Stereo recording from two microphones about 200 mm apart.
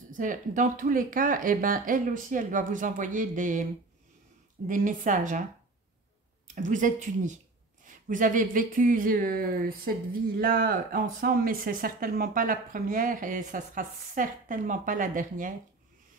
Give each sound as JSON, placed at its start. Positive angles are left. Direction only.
{"t": 0.1, "sound": "speech", "side_deg": -40}
{"t": 4.6, "sound": "speech", "side_deg": -40}
{"t": 6.4, "sound": "speech", "side_deg": -40}